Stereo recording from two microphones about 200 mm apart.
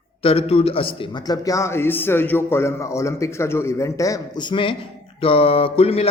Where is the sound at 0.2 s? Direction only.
30° left (ahead or behind).